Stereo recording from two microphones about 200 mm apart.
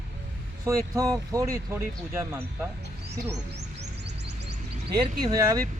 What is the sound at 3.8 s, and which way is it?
Music, 60° right (ahead or behind).